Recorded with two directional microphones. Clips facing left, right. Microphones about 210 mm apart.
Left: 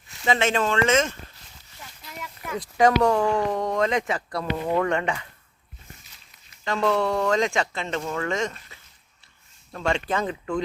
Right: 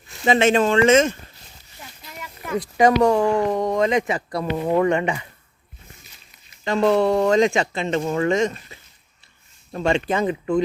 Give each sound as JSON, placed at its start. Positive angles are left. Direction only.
{"t": 0.3, "sound": "speech", "side_deg": -20}
{"t": 2.0, "sound": "a sound", "side_deg": 0}
{"t": 2.8, "sound": "speech", "side_deg": -10}
{"t": 6.7, "sound": "speech", "side_deg": -20}